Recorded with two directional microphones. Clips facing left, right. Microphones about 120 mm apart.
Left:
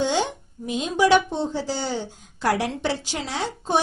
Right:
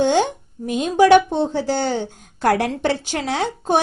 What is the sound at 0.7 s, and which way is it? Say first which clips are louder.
Speech: right 6 dB; 55° right (ahead or behind).